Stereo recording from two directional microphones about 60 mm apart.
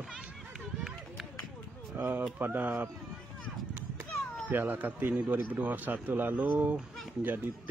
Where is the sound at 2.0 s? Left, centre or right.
Right.